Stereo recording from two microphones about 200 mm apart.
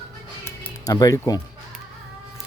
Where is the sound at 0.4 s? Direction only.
15° left (ahead or behind).